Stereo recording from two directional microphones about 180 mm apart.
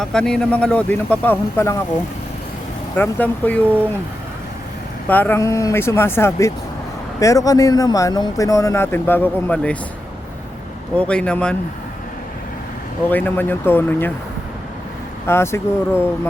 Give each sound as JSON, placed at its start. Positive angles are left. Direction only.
{"t": 0.0, "sound": "speech", "side_deg": 5}
{"t": 2.9, "sound": "speech", "side_deg": 10}
{"t": 5.0, "sound": "speech", "side_deg": 10}
{"t": 10.9, "sound": "speech", "side_deg": 5}
{"t": 13.1, "sound": "speech", "side_deg": 10}
{"t": 15.3, "sound": "speech", "side_deg": 15}